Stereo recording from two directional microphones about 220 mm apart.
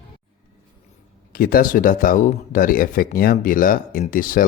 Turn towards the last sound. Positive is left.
turn(degrees=40)  # may be behind; listen again after turning